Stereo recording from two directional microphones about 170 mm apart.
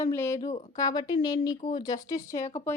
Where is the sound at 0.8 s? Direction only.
20° left (ahead or behind).